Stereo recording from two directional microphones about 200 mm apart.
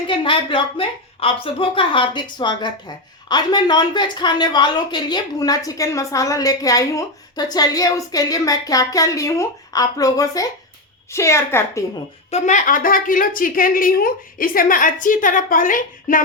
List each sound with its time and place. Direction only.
0.1 s a woman's voice: 25° left (ahead or behind)
12.3 s a woman's voice: 40° left (ahead or behind)